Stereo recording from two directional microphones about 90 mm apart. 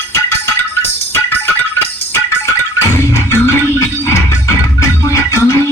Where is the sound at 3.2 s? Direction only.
30° left (ahead or behind).